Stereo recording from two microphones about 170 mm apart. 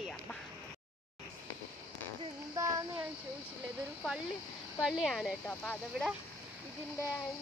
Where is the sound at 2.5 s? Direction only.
20° right (ahead or behind).